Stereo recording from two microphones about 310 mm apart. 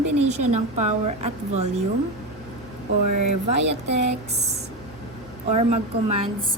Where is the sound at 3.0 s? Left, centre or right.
Right.